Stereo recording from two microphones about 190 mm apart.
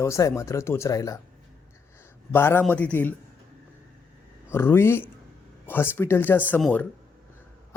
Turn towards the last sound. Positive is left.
turn(degrees=5)  # may be behind; listen again after turning